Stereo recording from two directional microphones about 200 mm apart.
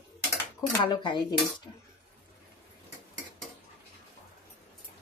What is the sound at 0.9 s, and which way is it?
Speech, 20° left (ahead or behind).